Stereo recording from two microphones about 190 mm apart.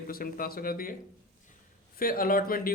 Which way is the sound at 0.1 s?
50° left (ahead or behind).